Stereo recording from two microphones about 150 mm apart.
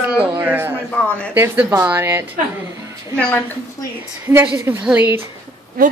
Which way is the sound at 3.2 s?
10° left (ahead or behind).